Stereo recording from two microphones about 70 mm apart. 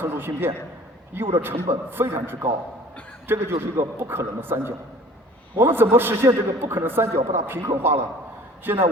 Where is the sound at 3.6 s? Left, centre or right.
Right.